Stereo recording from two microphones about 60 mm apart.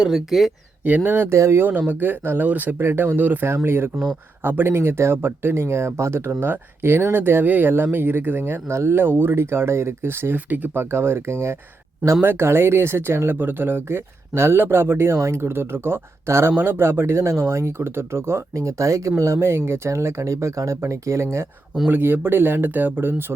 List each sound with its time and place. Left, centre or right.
0.0 s speech: centre
0.9 s speech: right
1.3 s speech: right
1.9 s speech: right
2.8 s speech: right
3.4 s speech: right
21.8 s speech: right